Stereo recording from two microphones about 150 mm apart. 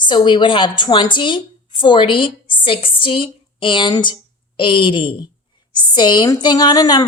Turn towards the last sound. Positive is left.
turn(degrees=25)  # may be behind; listen again after turning